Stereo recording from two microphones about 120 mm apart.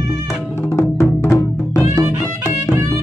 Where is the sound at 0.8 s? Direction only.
25° left (ahead or behind).